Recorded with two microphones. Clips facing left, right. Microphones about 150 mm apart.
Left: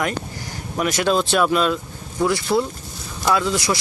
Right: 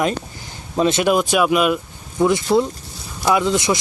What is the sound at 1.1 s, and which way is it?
Speech, 10° right (ahead or behind).